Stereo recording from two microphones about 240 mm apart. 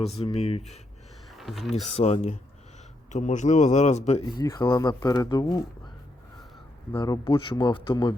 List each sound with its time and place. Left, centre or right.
0.0 s speech: left
1.3 s a sound: centre
1.7 s speech: left
6.9 s speech: centre